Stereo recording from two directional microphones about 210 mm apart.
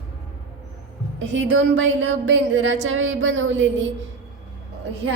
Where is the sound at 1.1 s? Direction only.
60° right (ahead or behind).